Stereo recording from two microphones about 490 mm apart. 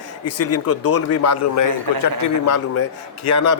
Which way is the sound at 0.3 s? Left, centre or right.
Left.